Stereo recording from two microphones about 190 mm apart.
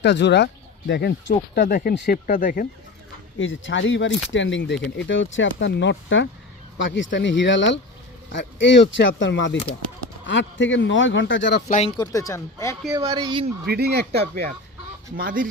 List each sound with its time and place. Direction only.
0.0 s speech: 65° left (ahead or behind)
1.6 s speech: 50° left (ahead or behind)
3.3 s speech: 85° left
11.9 s speech: 15° left (ahead or behind)
12.9 s speech: 20° right (ahead or behind)
13.7 s speech: 55° right (ahead or behind)
15.1 s speech: 45° right (ahead or behind)